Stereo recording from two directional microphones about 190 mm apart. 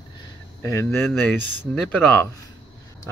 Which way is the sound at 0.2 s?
15° left (ahead or behind).